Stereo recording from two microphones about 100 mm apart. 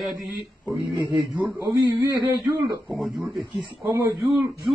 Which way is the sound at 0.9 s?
50° right (ahead or behind).